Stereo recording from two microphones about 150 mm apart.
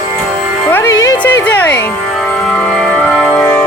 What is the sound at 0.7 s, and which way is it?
Speech, 20° left (ahead or behind).